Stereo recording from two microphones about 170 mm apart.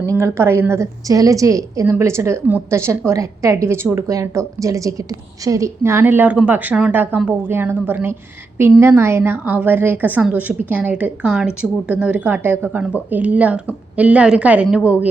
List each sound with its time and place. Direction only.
0.2 s a woman's voice: 15° right (ahead or behind)